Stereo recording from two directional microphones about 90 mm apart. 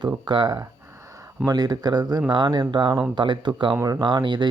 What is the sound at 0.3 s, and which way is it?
Speech, 50° right (ahead or behind).